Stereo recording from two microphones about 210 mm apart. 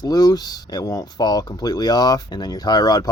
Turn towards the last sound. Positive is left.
turn(degrees=20)  # may be behind; listen again after turning